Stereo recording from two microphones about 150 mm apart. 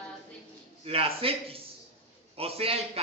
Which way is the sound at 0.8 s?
40° right (ahead or behind).